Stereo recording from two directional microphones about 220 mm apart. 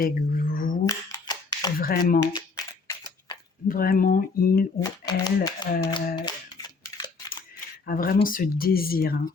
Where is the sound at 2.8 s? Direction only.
15° left (ahead or behind).